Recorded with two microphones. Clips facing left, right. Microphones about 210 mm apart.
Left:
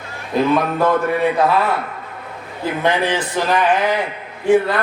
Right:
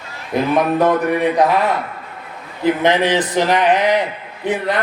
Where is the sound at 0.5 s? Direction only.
20° right (ahead or behind).